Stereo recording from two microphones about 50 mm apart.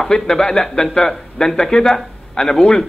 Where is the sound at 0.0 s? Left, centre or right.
Centre.